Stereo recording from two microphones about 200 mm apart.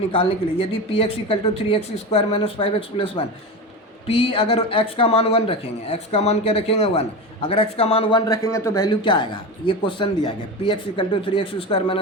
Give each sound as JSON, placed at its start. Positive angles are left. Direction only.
{"t": 0.1, "sound": "speech", "side_deg": 25}